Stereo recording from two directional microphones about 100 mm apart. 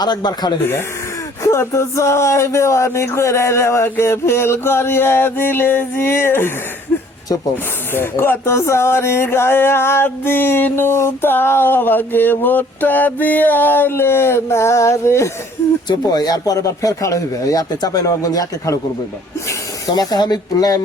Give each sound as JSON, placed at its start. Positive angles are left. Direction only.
{"t": 0.0, "sound": "speech", "side_deg": 45}
{"t": 1.5, "sound": "speech", "side_deg": 30}
{"t": 7.5, "sound": "speech", "side_deg": 20}
{"t": 15.9, "sound": "speech", "side_deg": 40}
{"t": 19.9, "sound": "speech", "side_deg": 40}